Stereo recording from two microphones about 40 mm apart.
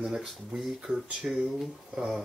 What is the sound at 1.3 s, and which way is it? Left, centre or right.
Speech, right.